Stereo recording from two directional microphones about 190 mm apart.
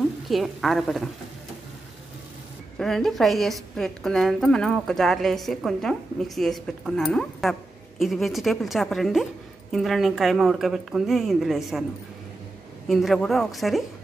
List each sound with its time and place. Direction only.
0.3 s a woman's voice: centre (ahead or behind)
2.8 s a woman's voice: centre (ahead or behind)
12.8 s a woman's voice: centre (ahead or behind)